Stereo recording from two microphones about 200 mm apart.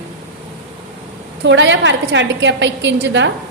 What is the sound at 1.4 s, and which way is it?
A woman's voice, 65° right (ahead or behind).